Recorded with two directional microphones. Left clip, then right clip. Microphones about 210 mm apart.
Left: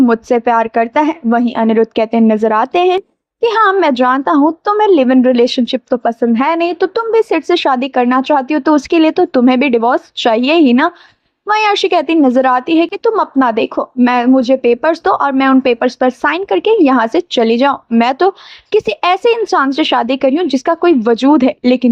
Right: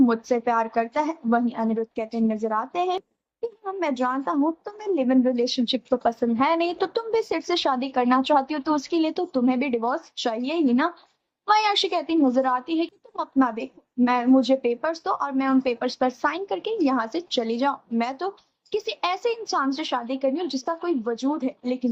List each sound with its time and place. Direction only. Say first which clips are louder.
0.0 s a woman's voice: left 10 dB; 35° left (ahead or behind)